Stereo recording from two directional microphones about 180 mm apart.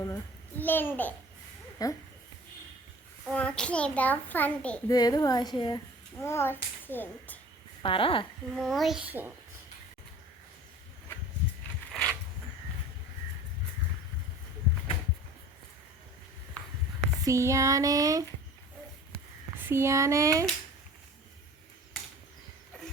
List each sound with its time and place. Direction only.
0.0 s a child's voice: 10° left (ahead or behind)
3.3 s a child's voice: 5° left (ahead or behind)
4.9 s a woman's voice: 20° left (ahead or behind)
7.8 s a woman's voice: 30° left (ahead or behind)
8.5 s a child's voice: centre (ahead or behind)
11.9 s pulleys: 5° left (ahead or behind)
17.2 s a sound: 15° right (ahead or behind)
19.5 s speech: 10° right (ahead or behind)